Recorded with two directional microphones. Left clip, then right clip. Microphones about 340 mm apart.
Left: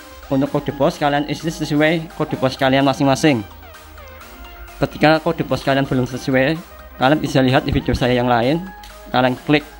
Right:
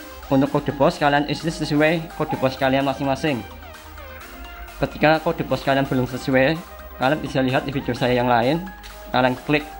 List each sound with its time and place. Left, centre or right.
0.3 s speech: centre
4.7 s speech: centre